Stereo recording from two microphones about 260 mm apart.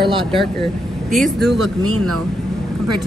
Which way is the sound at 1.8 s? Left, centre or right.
Right.